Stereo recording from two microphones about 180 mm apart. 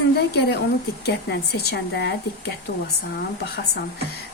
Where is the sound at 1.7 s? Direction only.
65° left (ahead or behind).